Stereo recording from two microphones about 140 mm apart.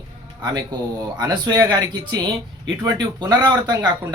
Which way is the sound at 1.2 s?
30° right (ahead or behind).